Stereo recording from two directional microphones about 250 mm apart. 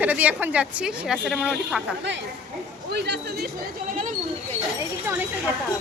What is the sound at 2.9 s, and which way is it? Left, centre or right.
Speech, right.